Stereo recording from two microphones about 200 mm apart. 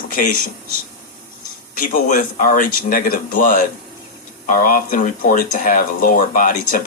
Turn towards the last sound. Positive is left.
turn(degrees=45)  # may be behind; listen again after turning